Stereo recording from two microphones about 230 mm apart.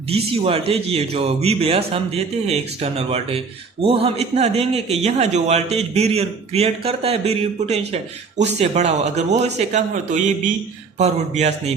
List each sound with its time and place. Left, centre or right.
0.1 s a man's voice: right